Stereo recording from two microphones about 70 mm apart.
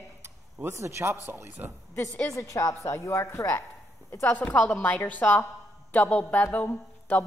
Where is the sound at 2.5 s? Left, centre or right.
Left.